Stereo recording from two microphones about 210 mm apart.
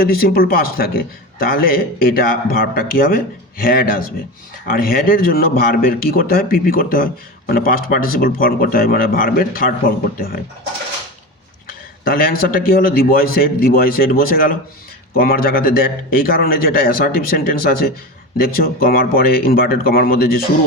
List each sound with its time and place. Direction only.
0.0 s a man's voice: 45° left (ahead or behind)
12.0 s a man's voice: 45° left (ahead or behind)